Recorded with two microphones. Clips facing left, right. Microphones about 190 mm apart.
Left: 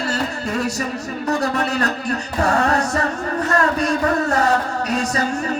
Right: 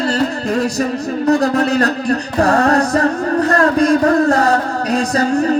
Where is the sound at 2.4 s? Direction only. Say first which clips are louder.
Right 5 dB; 40° right (ahead or behind).